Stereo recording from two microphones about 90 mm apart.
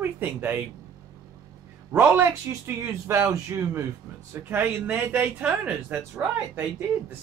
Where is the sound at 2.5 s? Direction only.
35° right (ahead or behind); by 6.2 s 15° right (ahead or behind).